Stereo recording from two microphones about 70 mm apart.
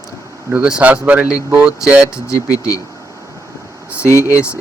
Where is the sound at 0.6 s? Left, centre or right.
Centre.